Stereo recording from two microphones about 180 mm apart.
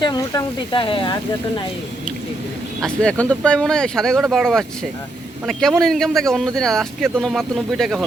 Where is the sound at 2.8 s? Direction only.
5° left (ahead or behind).